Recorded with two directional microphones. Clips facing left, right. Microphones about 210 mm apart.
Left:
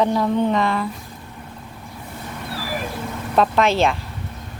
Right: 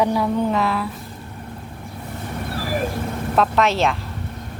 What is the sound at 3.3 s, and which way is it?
Speech, centre (ahead or behind).